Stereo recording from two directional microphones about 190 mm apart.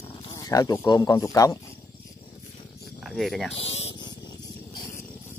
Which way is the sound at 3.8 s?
30° left (ahead or behind).